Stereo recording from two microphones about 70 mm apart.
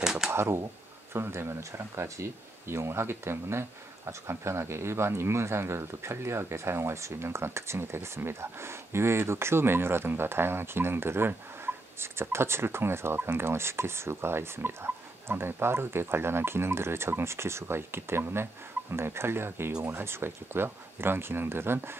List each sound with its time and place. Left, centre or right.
0.0 s typewriter: centre
0.3 s speech: right